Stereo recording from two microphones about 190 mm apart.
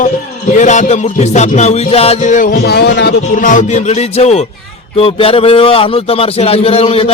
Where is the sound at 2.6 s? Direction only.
60° left (ahead or behind).